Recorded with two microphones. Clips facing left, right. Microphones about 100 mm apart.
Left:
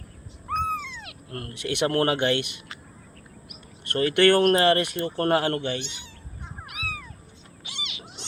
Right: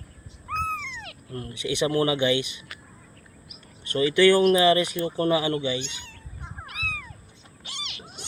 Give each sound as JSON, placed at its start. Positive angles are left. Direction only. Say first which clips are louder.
{"t": 0.4, "sound": "owl", "louder": "left 2 dB", "side_deg": 15}
{"t": 1.5, "sound": "speech", "louder": "even", "side_deg": 55}
{"t": 3.8, "sound": "speech", "louder": "right 1 dB", "side_deg": 55}
{"t": 6.7, "sound": "cat", "louder": "even", "side_deg": 10}